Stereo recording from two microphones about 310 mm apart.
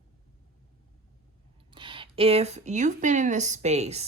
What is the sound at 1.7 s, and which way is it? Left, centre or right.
Speech, centre.